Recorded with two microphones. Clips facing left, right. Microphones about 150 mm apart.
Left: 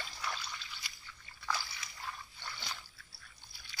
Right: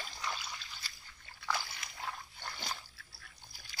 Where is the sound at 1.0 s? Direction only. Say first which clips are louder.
Even; 60° right (ahead or behind).